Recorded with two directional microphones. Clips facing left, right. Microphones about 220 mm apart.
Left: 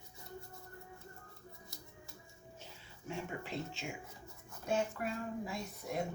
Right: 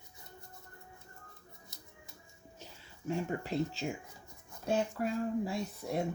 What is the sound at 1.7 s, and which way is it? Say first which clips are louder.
Music: left 3 dB; 20° right (ahead or behind).